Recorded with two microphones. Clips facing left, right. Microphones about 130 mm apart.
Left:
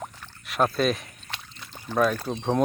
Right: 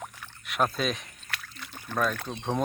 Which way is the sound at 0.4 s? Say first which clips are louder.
Left 4 dB; centre (ahead or behind).